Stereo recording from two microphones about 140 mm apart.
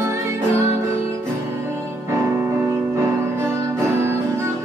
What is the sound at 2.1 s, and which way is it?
Music, 20° right (ahead or behind).